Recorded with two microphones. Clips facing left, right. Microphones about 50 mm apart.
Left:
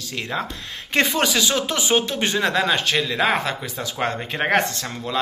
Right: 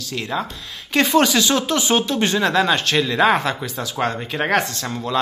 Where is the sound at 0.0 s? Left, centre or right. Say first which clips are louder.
Right 2 dB; centre.